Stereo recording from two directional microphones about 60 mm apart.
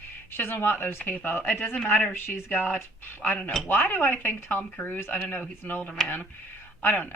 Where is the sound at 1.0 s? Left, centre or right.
Left.